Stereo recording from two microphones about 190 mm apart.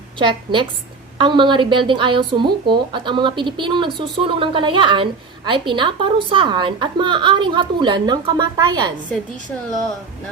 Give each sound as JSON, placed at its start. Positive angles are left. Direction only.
{"t": 0.2, "sound": "a woman's voice", "side_deg": -25}